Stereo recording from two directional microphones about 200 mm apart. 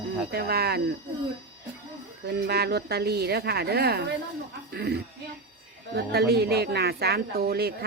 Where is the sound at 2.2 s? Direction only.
55° right (ahead or behind).